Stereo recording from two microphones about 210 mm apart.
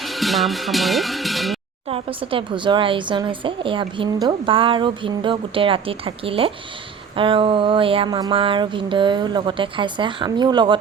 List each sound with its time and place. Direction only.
0.0 s speech: centre (ahead or behind)
1.9 s a woman's voice: 25° right (ahead or behind)